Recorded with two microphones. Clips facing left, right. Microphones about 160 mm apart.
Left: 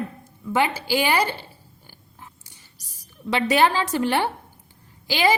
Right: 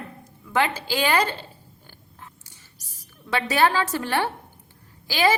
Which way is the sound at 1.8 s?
10° left (ahead or behind).